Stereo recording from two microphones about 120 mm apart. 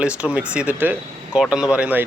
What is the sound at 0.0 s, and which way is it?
Speech, 10° right (ahead or behind).